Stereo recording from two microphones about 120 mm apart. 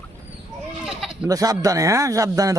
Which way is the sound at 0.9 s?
5° right (ahead or behind).